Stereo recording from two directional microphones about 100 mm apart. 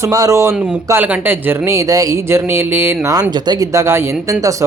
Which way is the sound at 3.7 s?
30° right (ahead or behind).